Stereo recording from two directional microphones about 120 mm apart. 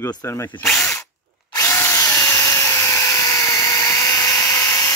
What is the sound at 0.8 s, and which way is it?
Drill, 25° left (ahead or behind).